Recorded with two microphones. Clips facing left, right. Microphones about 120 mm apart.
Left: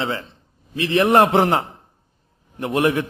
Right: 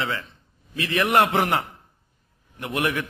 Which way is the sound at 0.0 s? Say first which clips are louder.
Left 3 dB; 30° left (ahead or behind).